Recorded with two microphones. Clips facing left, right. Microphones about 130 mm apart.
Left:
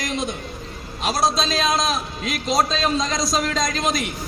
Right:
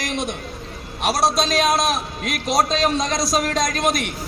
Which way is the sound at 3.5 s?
55° right (ahead or behind).